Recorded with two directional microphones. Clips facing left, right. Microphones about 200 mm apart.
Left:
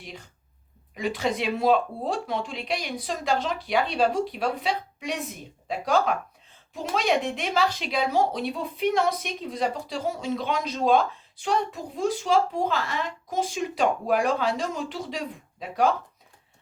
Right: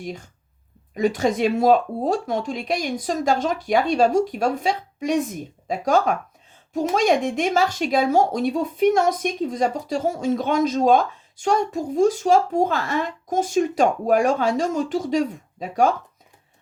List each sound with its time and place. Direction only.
0.0 s speech: 45° right (ahead or behind)